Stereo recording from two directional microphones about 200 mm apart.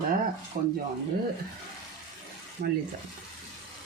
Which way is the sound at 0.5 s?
40° right (ahead or behind).